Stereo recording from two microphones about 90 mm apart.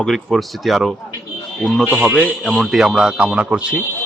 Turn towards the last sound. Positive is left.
turn(degrees=-15)  # may be behind; listen again after turning